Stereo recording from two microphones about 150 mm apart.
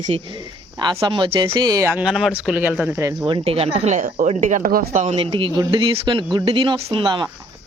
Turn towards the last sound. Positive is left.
turn(degrees=-30)  # may be behind; listen again after turning